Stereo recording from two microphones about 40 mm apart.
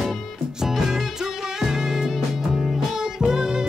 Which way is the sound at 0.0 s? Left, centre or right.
Centre.